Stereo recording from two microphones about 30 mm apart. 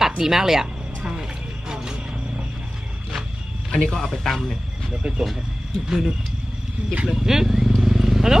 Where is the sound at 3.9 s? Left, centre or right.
Centre.